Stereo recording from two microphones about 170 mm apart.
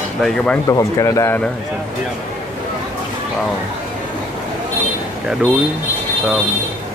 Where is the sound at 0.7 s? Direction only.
20° left (ahead or behind).